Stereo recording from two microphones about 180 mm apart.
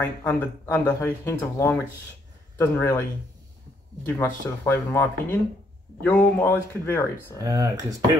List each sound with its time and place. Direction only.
0.0 s speech: 10° left (ahead or behind)
7.4 s speech: 20° right (ahead or behind)